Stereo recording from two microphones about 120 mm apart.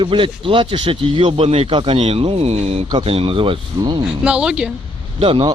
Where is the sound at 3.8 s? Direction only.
35° right (ahead or behind).